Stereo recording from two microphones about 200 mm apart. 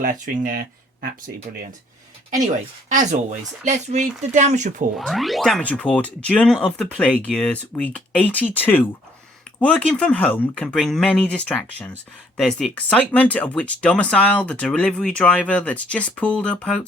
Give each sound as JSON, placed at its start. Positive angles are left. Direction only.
{"t": 0.0, "sound": "speech", "side_deg": -45}
{"t": 3.6, "sound": "speech", "side_deg": -35}
{"t": 4.9, "sound": "speech", "side_deg": 0}